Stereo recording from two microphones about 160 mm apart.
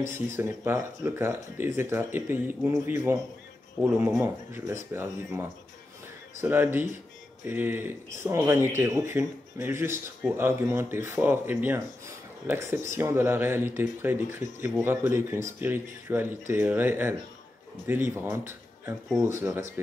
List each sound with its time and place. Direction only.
0.4 s speech: 15° right (ahead or behind)
4.2 s speech: 15° right (ahead or behind)